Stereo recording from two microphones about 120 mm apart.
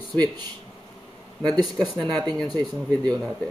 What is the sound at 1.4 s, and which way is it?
Speech, 5° left (ahead or behind).